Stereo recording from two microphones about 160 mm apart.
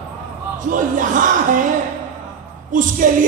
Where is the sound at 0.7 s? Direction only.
55° right (ahead or behind).